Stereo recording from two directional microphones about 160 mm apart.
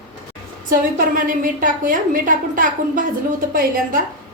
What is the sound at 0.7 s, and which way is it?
A woman's voice, 60° right (ahead or behind).